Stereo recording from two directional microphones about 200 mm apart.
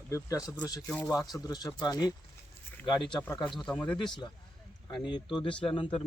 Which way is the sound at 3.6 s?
5° left (ahead or behind).